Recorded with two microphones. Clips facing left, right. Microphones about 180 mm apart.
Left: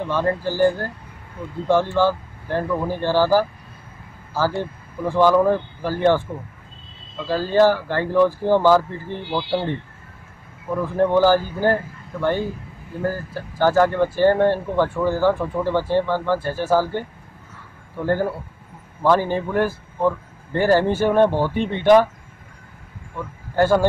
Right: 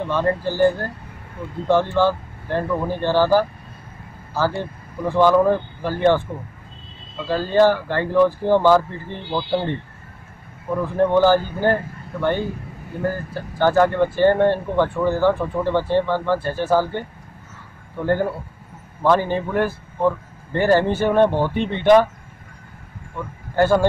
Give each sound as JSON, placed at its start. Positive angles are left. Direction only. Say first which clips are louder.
{"t": 0.0, "sound": "speech", "louder": "right 1 dB", "side_deg": 10}
{"t": 2.0, "sound": "speech", "louder": "even", "side_deg": 10}
{"t": 7.2, "sound": "speech", "louder": "even", "side_deg": 5}
{"t": 11.0, "sound": "speech", "louder": "right 1 dB", "side_deg": 10}
{"t": 17.9, "sound": "speech", "louder": "right 1 dB", "side_deg": 5}
{"t": 23.5, "sound": "speech", "louder": "even", "side_deg": 10}